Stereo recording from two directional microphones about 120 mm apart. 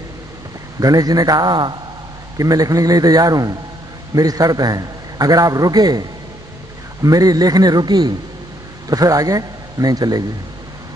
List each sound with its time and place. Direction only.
0.7 s a man's voice: 30° right (ahead or behind)